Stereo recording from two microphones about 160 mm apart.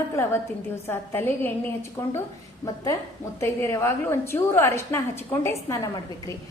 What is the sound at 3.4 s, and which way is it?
A woman's voice, 15° left (ahead or behind).